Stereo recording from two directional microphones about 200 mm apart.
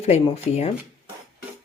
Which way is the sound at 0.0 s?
30° left (ahead or behind).